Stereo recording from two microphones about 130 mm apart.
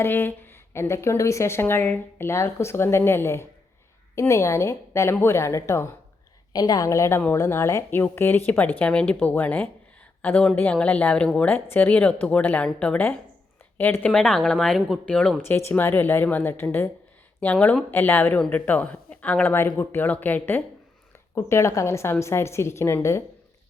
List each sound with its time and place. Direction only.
0.0 s a woman's voice: 15° left (ahead or behind)